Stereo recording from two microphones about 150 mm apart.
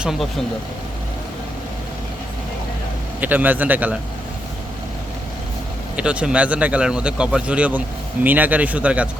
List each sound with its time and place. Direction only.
0.0 s speech: 5° right (ahead or behind)
3.2 s a man's voice: 10° right (ahead or behind)
6.0 s a man's voice: 5° right (ahead or behind)